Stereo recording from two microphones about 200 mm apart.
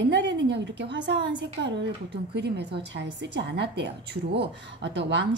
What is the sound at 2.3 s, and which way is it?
A woman's voice, 55° right (ahead or behind).